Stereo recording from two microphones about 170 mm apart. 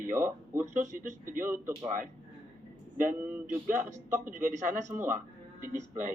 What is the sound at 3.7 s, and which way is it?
Speech, 50° right (ahead or behind).